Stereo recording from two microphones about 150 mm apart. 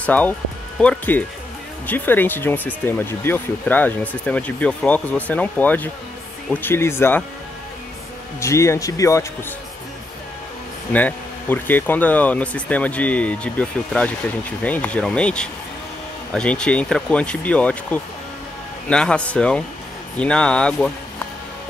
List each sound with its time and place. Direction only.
0.0 s speech: 10° left (ahead or behind)
8.4 s speech: 20° left (ahead or behind)
10.9 s speech: 10° left (ahead or behind)